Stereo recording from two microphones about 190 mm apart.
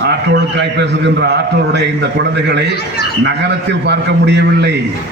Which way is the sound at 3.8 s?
65° right (ahead or behind).